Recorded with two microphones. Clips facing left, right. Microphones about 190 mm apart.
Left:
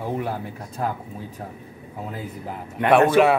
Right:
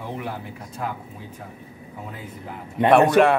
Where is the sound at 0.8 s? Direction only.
40° left (ahead or behind).